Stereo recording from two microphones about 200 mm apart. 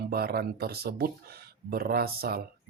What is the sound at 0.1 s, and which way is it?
Speech, 50° right (ahead or behind).